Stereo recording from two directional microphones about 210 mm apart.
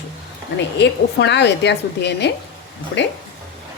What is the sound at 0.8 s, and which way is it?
Speech, 55° left (ahead or behind).